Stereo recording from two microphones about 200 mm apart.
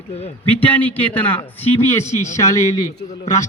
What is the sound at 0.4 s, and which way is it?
A man's voice, 10° left (ahead or behind).